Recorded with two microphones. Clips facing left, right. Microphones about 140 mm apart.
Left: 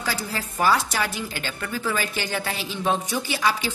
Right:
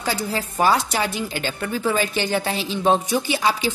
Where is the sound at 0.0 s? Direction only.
20° right (ahead or behind).